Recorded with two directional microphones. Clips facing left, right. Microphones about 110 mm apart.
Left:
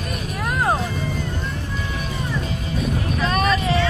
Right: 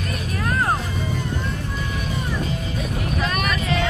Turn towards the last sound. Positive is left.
turn(degrees=30)  # may be behind; listen again after turning